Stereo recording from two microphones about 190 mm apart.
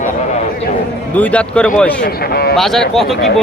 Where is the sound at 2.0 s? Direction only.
55° left (ahead or behind).